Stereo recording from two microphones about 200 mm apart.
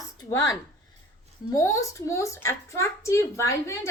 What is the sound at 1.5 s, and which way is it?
A woman's voice, 15° left (ahead or behind).